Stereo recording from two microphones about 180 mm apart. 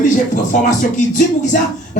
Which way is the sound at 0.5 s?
45° left (ahead or behind).